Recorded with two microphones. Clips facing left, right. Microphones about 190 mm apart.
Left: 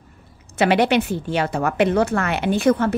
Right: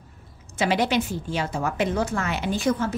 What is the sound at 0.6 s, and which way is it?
A woman's voice, 65° left (ahead or behind).